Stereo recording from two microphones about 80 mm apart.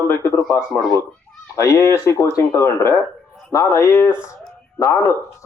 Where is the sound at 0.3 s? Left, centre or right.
Left.